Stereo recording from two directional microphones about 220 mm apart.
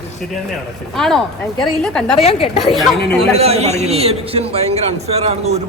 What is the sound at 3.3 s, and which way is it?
A man's voice, 30° right (ahead or behind).